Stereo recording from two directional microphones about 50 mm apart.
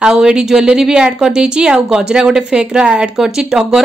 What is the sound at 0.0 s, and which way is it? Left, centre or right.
A woman's voice, centre.